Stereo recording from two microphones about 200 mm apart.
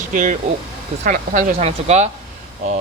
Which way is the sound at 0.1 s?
40° right (ahead or behind).